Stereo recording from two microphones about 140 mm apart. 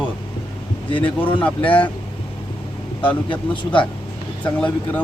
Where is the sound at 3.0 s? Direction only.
35° left (ahead or behind).